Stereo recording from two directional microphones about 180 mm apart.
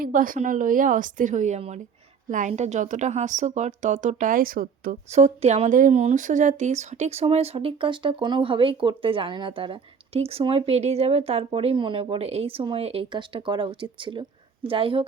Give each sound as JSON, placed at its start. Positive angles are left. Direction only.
{"t": 0.0, "sound": "a woman's voice", "side_deg": -50}
{"t": 5.1, "sound": "speech", "side_deg": -35}